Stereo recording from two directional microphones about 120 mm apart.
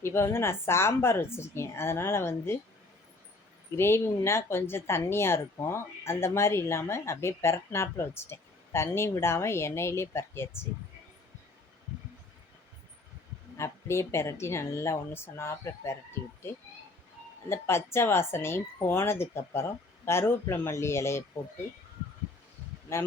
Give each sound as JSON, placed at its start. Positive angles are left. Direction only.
{"t": 0.0, "sound": "speech", "side_deg": 20}
{"t": 3.8, "sound": "speech", "side_deg": 20}
{"t": 13.6, "sound": "speech", "side_deg": 20}
{"t": 17.5, "sound": "speech", "side_deg": 20}